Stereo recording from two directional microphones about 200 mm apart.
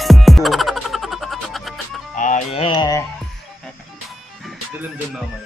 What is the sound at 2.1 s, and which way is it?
Music, 40° left (ahead or behind).